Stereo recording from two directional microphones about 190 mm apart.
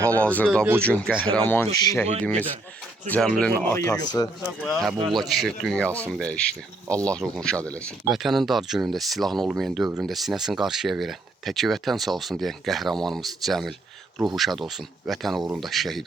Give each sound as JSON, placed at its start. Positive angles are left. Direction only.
{"t": 0.2, "sound": "speech", "side_deg": 10}
{"t": 4.6, "sound": "speech", "side_deg": 0}
{"t": 4.9, "sound": "speech", "side_deg": -25}
{"t": 5.2, "sound": "speech", "side_deg": 0}